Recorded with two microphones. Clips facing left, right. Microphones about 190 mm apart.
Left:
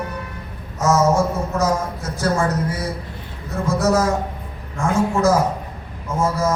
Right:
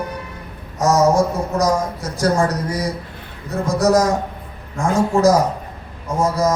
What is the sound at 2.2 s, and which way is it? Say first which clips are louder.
A man's voice: right 2 dB; 35° right (ahead or behind).